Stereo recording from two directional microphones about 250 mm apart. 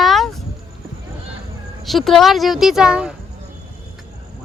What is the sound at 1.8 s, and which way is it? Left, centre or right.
Speech, centre.